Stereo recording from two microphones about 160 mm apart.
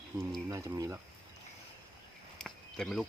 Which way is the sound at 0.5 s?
20° right (ahead or behind).